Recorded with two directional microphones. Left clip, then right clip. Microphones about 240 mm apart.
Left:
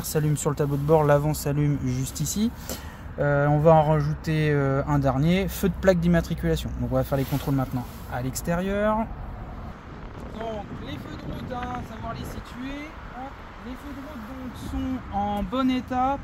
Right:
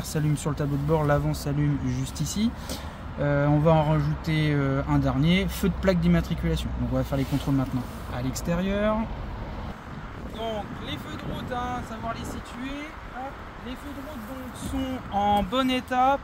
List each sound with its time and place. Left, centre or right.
0.1 s speech: left
15.1 s speech: right